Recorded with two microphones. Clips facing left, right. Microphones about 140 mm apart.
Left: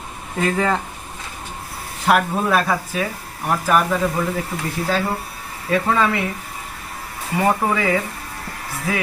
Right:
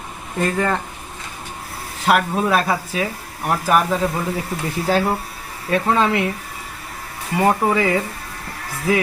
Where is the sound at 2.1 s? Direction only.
5° right (ahead or behind).